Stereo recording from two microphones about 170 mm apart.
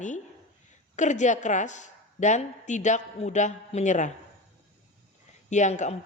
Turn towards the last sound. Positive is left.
turn(degrees=45)  # may be behind; listen again after turning